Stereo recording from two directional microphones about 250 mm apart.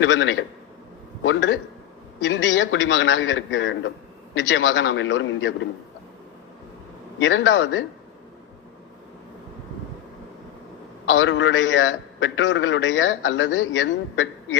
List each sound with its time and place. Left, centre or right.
0.0 s a man's voice: left
7.2 s a man's voice: left
11.0 s a man's voice: left